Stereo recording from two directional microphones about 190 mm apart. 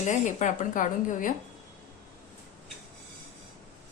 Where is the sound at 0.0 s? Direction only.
40° left (ahead or behind).